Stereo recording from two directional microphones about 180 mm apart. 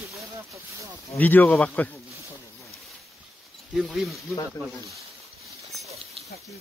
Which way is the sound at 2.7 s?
Centre (ahead or behind).